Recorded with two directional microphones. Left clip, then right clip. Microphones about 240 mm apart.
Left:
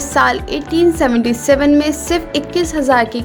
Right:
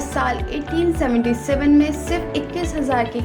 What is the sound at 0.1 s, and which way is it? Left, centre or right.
A woman's voice, left.